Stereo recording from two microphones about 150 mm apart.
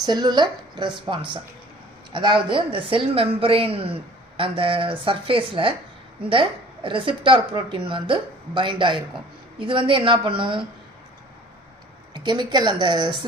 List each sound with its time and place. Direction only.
0.0 s a woman's voice: 25° right (ahead or behind)
12.1 s a woman's voice: 30° right (ahead or behind)